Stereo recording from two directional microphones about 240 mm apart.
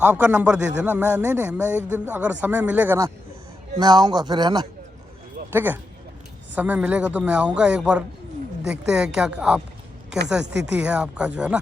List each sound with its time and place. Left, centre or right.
0.0 s a man's voice: centre
10.4 s speech: right
10.7 s a man's voice: centre